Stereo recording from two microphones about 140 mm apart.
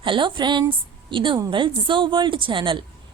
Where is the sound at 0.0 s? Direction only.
35° right (ahead or behind).